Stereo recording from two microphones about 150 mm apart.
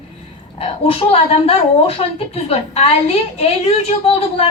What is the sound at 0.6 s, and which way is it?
A woman's voice, 40° left (ahead or behind).